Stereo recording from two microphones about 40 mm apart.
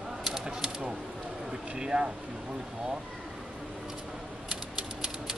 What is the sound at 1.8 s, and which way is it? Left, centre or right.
Speech, right.